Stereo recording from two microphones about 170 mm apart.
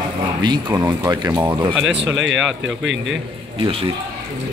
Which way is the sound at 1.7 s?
5° right (ahead or behind).